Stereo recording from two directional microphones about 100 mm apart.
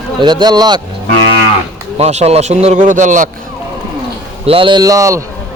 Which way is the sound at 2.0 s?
90° right.